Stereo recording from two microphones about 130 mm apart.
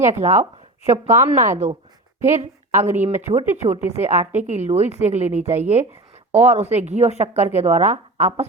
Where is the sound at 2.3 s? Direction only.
60° right (ahead or behind).